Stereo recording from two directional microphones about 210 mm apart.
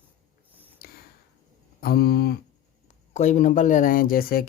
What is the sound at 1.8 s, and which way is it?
Speech, 50° left (ahead or behind).